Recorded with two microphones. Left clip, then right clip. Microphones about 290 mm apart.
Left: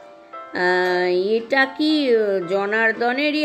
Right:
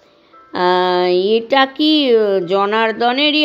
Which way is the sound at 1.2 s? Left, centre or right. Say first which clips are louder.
Right 6 dB; right.